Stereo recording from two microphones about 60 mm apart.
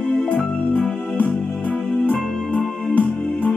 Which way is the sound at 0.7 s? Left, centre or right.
Left.